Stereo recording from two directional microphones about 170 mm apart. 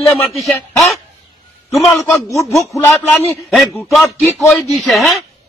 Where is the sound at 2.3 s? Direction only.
20° left (ahead or behind).